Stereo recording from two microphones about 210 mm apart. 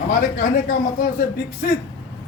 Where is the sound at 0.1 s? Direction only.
40° left (ahead or behind).